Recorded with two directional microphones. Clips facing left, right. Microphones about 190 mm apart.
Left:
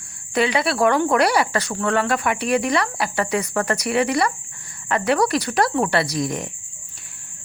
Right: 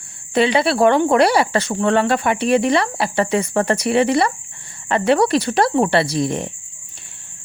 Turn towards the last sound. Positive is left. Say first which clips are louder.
# right 4 dB
turn(degrees=-30)  # may be behind; listen again after turning